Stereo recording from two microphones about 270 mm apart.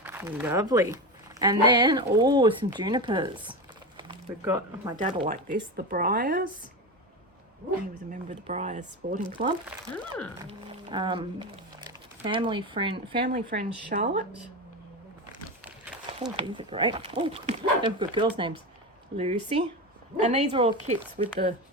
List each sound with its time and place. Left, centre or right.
0.0 s speech: centre
5.0 s speech: right
8.1 s speech: right
9.6 s speech: centre
10.4 s speech: centre
13.2 s speech: right
16.4 s speech: centre